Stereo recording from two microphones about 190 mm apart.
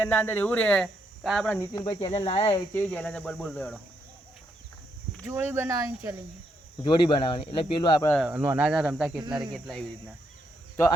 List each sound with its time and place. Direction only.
0.0 s speech: 10° left (ahead or behind)
1.7 s speech: 25° left (ahead or behind)
2.7 s speech: 5° left (ahead or behind)
5.2 s speech: 15° right (ahead or behind)
6.8 s speech: 25° left (ahead or behind)
8.2 s speech: 10° right (ahead or behind)